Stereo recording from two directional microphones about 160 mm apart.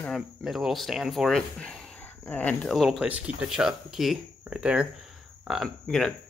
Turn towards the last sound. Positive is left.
turn(degrees=5)  # may be behind; listen again after turning